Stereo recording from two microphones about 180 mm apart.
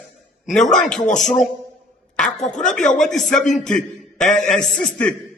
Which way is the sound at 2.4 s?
40° left (ahead or behind).